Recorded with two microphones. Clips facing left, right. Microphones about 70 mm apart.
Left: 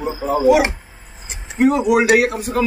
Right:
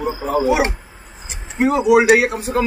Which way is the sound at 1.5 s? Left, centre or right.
Centre.